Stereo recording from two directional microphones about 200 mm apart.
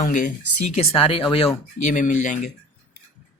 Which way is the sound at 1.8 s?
40° left (ahead or behind).